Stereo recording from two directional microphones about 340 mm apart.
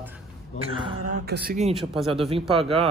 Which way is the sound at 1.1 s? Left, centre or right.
Right.